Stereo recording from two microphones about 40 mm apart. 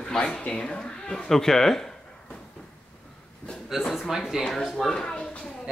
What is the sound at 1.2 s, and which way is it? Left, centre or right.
Speech, centre.